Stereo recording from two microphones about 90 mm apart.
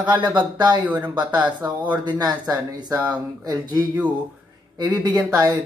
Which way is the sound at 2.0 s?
50° right (ahead or behind).